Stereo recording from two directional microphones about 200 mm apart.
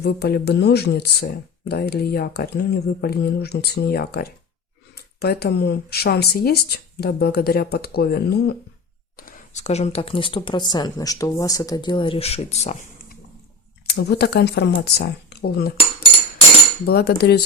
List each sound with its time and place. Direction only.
0.0 s speech: 55° left (ahead or behind)
9.1 s speech: 40° left (ahead or behind)
13.9 s speech: 55° left (ahead or behind)
16.8 s speech: 50° left (ahead or behind)